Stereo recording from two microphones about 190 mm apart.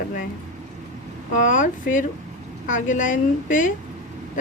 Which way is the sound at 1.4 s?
40° left (ahead or behind).